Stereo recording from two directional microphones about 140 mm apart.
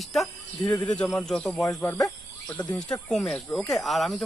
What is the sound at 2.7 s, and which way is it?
Speech, 10° left (ahead or behind).